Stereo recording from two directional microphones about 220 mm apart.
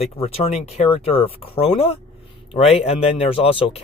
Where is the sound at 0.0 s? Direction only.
30° left (ahead or behind).